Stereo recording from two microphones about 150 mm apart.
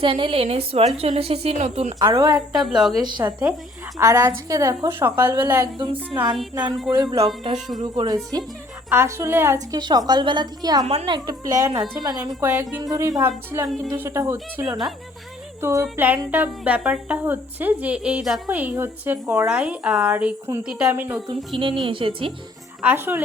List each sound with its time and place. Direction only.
0.0 s a woman's voice: 35° right (ahead or behind)
2.0 s a woman's voice: 25° right (ahead or behind)
2.6 s a woman's voice: centre (ahead or behind)
3.0 s a woman's voice: 30° right (ahead or behind); by 5.6 s 15° right (ahead or behind)
6.5 s a woman's voice: 25° right (ahead or behind)
9.8 s a woman's voice: 25° right (ahead or behind)
12.4 s speech: 10° right (ahead or behind)
12.8 s a woman's voice: 25° right (ahead or behind)
21.5 s a woman's voice: 35° right (ahead or behind)
22.8 s speech: 15° right (ahead or behind)